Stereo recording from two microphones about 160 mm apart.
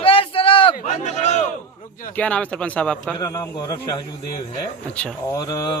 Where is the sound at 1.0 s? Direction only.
45° left (ahead or behind).